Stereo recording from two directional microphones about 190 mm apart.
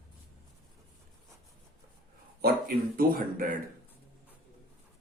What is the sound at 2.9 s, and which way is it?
Speech, 50° right (ahead or behind).